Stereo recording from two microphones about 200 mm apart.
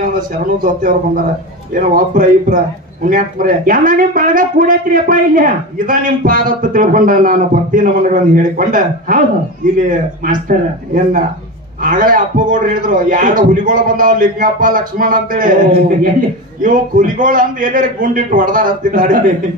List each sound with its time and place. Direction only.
0.6 s a man's voice: 45° right (ahead or behind)
11.8 s speech: 40° right (ahead or behind)